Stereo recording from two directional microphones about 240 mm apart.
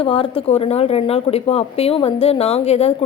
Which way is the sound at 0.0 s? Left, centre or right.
Left.